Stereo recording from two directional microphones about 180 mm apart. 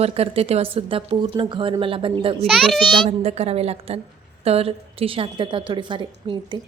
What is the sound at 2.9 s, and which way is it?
A woman's voice, 35° right (ahead or behind).